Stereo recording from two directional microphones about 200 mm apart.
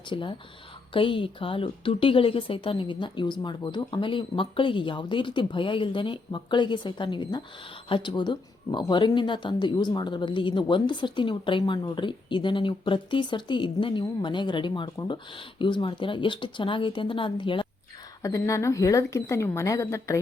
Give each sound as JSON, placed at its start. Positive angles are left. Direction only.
{"t": 0.1, "sound": "speech", "side_deg": 25}